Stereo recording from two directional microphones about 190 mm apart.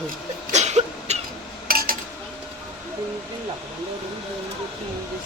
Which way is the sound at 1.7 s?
50° right (ahead or behind).